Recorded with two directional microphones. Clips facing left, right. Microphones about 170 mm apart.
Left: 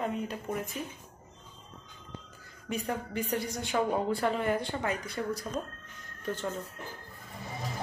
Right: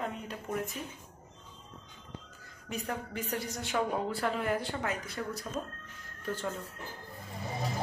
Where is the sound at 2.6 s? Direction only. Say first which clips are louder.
Left 3 dB; centre (ahead or behind).